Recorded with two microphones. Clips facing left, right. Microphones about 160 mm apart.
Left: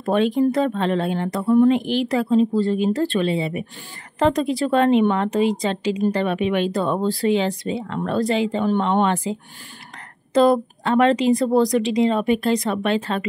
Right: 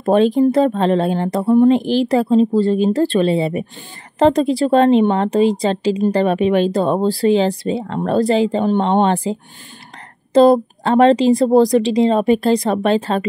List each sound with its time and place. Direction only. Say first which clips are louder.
0.0 s a woman's voice: right 5 dB; 35° right (ahead or behind)